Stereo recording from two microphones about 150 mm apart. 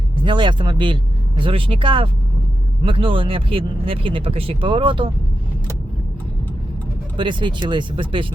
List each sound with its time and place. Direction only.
0.2 s speech: 30° right (ahead or behind)
7.2 s speech: 35° right (ahead or behind)